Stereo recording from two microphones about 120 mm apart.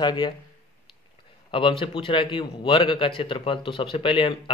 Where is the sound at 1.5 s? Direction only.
45° left (ahead or behind).